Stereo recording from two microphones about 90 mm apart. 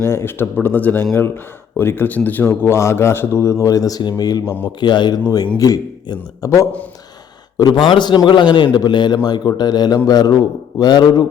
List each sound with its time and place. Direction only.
0.0 s a man's voice: 30° left (ahead or behind); by 5.2 s 55° left (ahead or behind)
5.5 s a man's voice: 45° left (ahead or behind)
7.5 s a man's voice: 45° left (ahead or behind)
7.9 s a man's voice: 60° left (ahead or behind)